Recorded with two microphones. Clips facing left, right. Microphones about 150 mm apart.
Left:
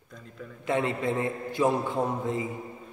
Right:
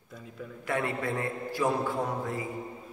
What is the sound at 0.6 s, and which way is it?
A man's voice, 20° left (ahead or behind).